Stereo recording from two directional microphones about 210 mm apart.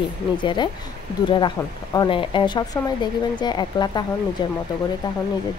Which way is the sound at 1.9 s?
25° left (ahead or behind).